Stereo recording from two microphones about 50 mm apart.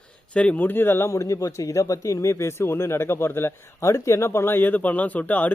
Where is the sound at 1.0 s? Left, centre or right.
Left.